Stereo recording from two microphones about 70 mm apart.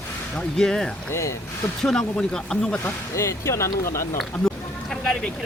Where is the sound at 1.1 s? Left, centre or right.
Left.